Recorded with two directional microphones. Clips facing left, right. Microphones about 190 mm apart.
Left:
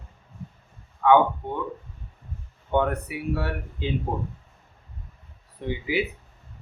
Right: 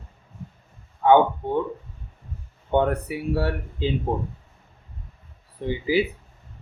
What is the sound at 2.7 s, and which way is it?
Speech, 30° right (ahead or behind).